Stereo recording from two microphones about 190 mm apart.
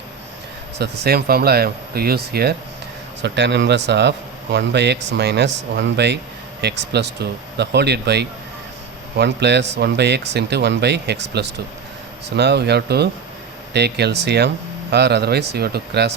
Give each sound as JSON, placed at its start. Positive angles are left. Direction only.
{"t": 1.0, "sound": "speech", "side_deg": -55}